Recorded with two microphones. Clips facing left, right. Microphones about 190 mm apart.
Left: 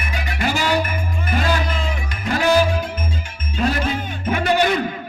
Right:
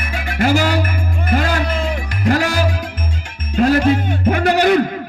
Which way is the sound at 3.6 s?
65° right (ahead or behind).